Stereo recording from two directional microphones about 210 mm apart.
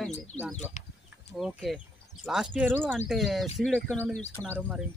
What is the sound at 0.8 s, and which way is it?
Speech, 35° left (ahead or behind).